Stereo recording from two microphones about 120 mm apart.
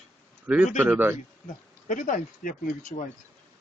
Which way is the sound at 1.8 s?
90° left.